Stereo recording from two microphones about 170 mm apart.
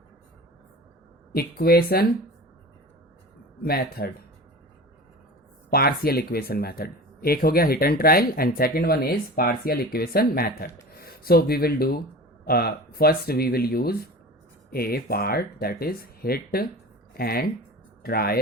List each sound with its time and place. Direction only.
1.3 s speech: 65° left (ahead or behind)
3.6 s speech: 65° left (ahead or behind)
5.7 s speech: 65° left (ahead or behind)